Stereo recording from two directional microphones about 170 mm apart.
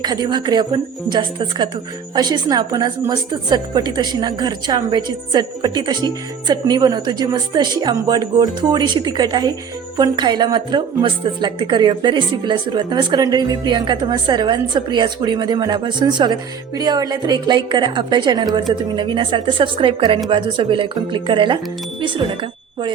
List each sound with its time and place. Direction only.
0.0 s a woman's voice: 25° right (ahead or behind)